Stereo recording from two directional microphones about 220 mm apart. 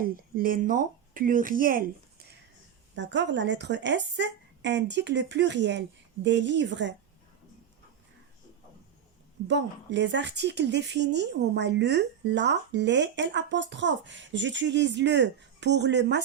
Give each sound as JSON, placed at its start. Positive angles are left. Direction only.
{"t": 0.0, "sound": "speech", "side_deg": -40}
{"t": 2.9, "sound": "speech", "side_deg": -55}
{"t": 9.5, "sound": "speech", "side_deg": -55}